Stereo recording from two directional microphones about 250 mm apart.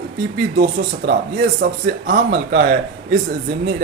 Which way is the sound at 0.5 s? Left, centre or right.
Right.